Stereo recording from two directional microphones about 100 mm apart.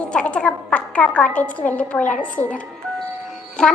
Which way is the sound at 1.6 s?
15° left (ahead or behind).